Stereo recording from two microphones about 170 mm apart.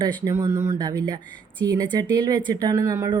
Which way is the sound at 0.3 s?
20° right (ahead or behind).